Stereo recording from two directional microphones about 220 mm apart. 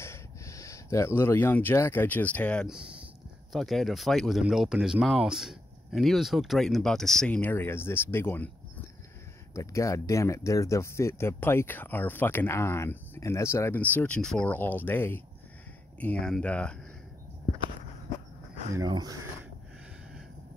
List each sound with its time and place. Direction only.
0.0 s speech: 15° left (ahead or behind)
9.6 s speech: 15° left (ahead or behind)
18.8 s speech: 15° right (ahead or behind)